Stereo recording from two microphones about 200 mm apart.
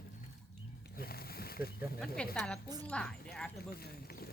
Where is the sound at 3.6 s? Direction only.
50° left (ahead or behind).